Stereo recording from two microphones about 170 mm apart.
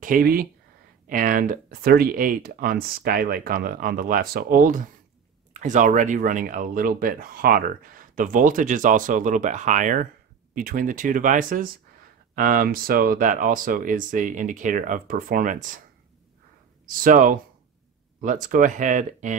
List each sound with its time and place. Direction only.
0.0 s speech: 55° right (ahead or behind)
16.8 s speech: 55° right (ahead or behind)